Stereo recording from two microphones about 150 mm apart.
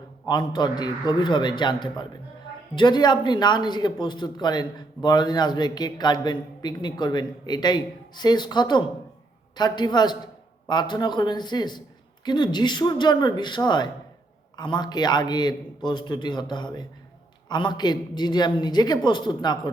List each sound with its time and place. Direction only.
0.3 s a man's voice: 30° left (ahead or behind)